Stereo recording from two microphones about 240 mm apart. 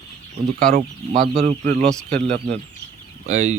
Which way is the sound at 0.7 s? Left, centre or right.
Right.